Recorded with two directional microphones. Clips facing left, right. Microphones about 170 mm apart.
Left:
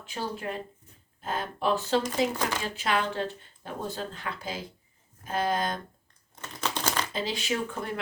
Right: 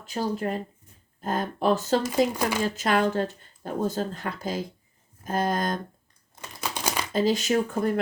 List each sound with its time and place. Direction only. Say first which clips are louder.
0.0 s speech: right 6 dB; 40° right (ahead or behind)
6.4 s crumpling: even; 10° right (ahead or behind)
7.1 s speech: right 8 dB; 45° right (ahead or behind)